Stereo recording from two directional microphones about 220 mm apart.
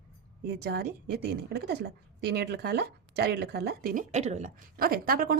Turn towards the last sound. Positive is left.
turn(degrees=-40)  # may be behind; listen again after turning